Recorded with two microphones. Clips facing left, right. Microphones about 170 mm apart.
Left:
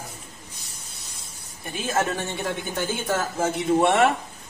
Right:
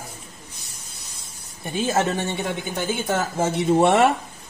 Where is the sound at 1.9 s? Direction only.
20° right (ahead or behind).